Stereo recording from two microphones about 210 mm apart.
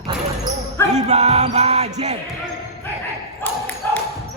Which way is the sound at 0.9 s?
30° right (ahead or behind).